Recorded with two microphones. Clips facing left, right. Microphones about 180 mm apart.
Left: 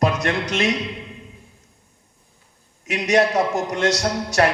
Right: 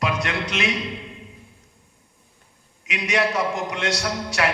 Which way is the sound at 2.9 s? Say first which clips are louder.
Left 5 dB; 40° left (ahead or behind).